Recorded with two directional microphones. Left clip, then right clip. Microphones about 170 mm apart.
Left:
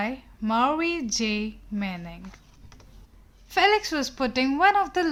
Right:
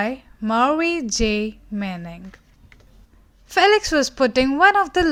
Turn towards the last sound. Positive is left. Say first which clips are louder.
# right 5 dB
turn(degrees=-35)  # may be behind; listen again after turning